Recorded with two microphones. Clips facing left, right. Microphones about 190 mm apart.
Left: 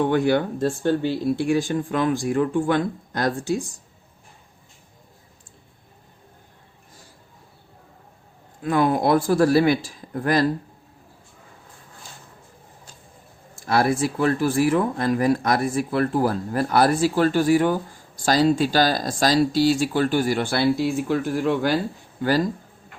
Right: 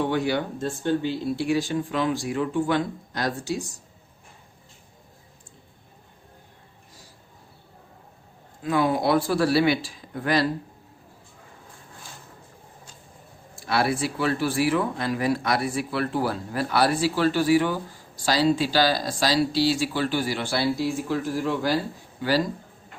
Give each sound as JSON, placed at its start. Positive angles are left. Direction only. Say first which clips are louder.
{"t": 0.0, "sound": "speech", "louder": "left 5 dB", "side_deg": 55}
{"t": 8.6, "sound": "speech", "louder": "left 3 dB", "side_deg": 50}
{"t": 13.6, "sound": "speech", "louder": "left 4 dB", "side_deg": 45}